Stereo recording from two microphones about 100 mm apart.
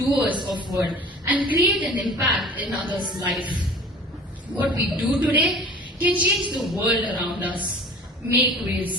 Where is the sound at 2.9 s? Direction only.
50° right (ahead or behind).